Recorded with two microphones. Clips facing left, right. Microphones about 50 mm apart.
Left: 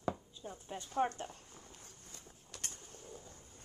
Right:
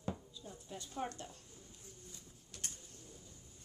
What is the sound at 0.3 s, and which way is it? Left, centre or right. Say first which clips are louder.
Speech: left 4 dB; left.